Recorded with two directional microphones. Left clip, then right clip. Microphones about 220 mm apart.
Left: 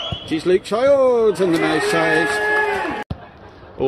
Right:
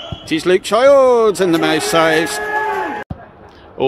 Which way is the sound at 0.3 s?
25° right (ahead or behind).